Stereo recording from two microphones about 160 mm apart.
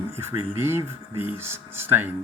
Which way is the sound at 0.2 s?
15° right (ahead or behind).